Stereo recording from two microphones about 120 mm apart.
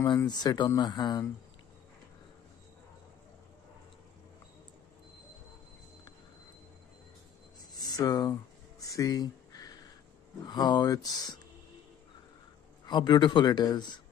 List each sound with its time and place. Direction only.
0.3 s a man's voice: 35° left (ahead or behind)
7.7 s a sound: 35° left (ahead or behind)
10.4 s a man's voice: 35° left (ahead or behind)
12.8 s a man's voice: 40° left (ahead or behind)